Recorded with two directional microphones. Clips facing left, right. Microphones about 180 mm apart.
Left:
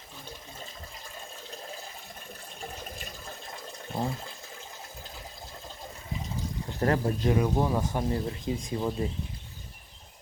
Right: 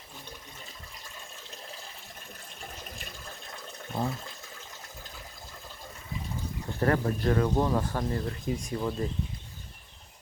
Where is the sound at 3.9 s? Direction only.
30° left (ahead or behind).